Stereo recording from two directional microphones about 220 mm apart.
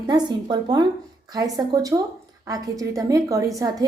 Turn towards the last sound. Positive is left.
turn(degrees=-15)  # may be behind; listen again after turning